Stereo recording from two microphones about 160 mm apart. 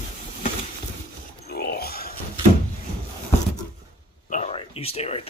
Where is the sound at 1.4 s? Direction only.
85° left.